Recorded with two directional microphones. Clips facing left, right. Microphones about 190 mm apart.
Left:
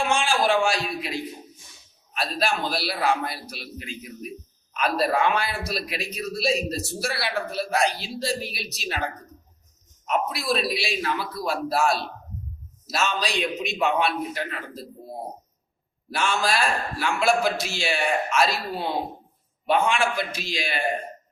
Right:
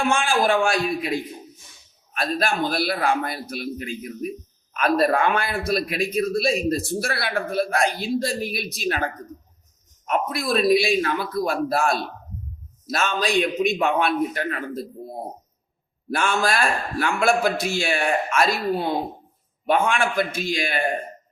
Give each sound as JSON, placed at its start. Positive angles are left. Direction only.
{"t": 0.0, "sound": "a man's voice", "side_deg": -55}
{"t": 2.1, "sound": "a man's voice", "side_deg": -50}
{"t": 10.1, "sound": "a man's voice", "side_deg": -50}
{"t": 16.0, "sound": "a man's voice", "side_deg": -50}